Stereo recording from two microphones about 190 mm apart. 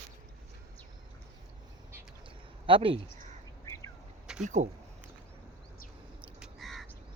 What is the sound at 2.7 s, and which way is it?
Speech, 30° right (ahead or behind).